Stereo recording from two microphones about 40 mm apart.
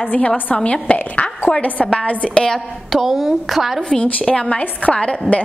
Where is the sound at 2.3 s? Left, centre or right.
Centre.